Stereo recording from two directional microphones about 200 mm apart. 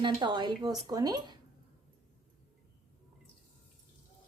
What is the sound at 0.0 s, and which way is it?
Speech, 20° right (ahead or behind).